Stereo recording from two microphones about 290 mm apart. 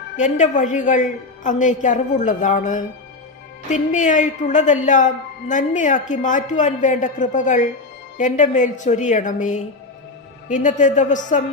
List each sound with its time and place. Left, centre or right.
0.2 s a woman's voice: left